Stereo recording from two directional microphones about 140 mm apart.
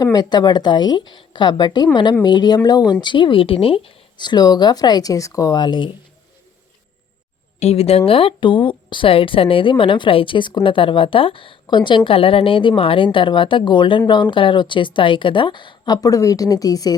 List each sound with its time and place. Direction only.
0.0 s speech: 30° left (ahead or behind)
7.6 s speech: 45° left (ahead or behind); by 16.9 s 25° left (ahead or behind)